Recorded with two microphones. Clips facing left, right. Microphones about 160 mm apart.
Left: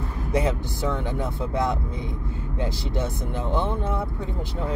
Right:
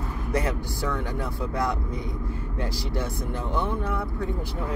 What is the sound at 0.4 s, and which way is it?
Speech, 20° left (ahead or behind).